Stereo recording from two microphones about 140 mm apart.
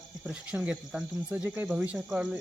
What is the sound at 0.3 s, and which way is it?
Cricket, 5° right (ahead or behind).